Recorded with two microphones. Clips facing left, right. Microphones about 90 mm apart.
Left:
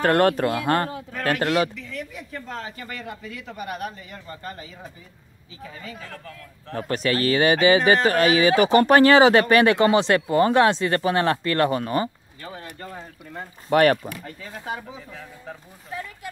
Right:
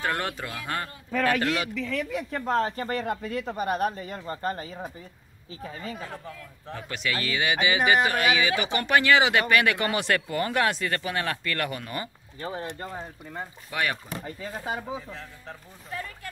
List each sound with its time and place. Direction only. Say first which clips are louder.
0.0 s speech: left 11 dB; 55° left (ahead or behind)
1.4 s speech: left 6 dB; 35° left (ahead or behind)
2.0 s speech: right 2 dB; 65° right (ahead or behind)
2.5 s speech: right 10 dB; 40° right (ahead or behind)
5.9 s speech: right 1 dB; 15° right (ahead or behind)
6.7 s speech: left 7 dB; 50° left (ahead or behind); by 12.1 s 35° left (ahead or behind)
12.4 s speech: right 5 dB; 30° right (ahead or behind)
12.9 s speech: right 1 dB; 5° right (ahead or behind)
13.7 s speech: left 13 dB; 55° left (ahead or behind)
14.2 s speech: right 1 dB; 20° right (ahead or behind)
15.0 s speech: left 2 dB; 5° left (ahead or behind)